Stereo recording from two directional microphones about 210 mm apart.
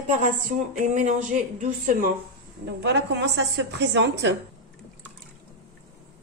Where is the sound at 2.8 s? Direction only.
55° right (ahead or behind).